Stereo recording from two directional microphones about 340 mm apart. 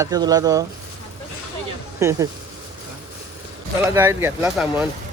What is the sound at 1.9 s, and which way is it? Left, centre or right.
Speech, centre.